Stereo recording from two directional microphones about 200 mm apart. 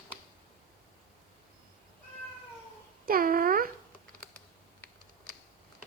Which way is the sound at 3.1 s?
45° right (ahead or behind).